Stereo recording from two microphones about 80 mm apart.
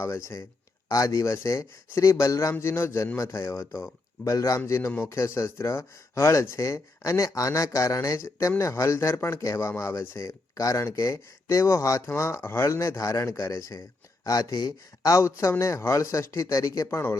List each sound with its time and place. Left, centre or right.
0.0 s speech: left